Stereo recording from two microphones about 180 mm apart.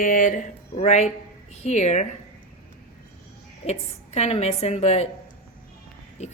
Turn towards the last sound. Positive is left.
turn(degrees=40)  # may be behind; listen again after turning